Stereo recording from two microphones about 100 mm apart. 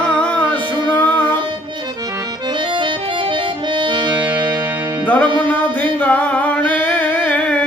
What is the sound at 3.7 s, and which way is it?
Accordion, 50° right (ahead or behind).